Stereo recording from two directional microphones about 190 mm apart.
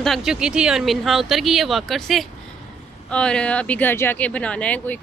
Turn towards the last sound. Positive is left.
turn(degrees=10)  # may be behind; listen again after turning